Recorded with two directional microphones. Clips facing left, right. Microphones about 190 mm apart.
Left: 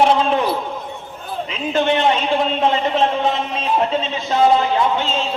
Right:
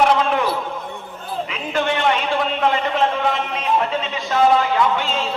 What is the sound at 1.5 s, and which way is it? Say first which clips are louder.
A man's voice: left 5 dB; 25° left (ahead or behind).